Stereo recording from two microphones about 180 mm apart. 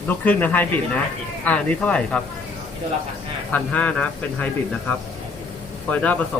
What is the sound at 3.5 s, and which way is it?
Speech, 10° left (ahead or behind).